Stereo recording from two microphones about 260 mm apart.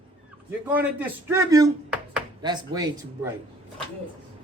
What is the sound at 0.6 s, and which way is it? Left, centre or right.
Speech, centre.